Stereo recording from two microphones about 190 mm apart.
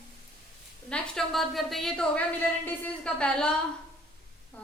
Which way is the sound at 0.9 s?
5° left (ahead or behind).